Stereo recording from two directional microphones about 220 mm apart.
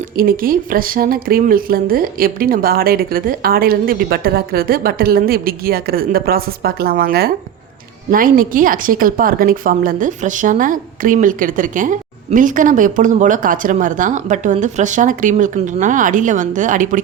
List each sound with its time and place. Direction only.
0.2 s a woman's voice: 40° right (ahead or behind)